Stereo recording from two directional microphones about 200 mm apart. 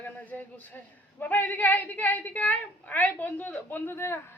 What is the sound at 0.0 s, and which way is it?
A man's voice, 10° left (ahead or behind).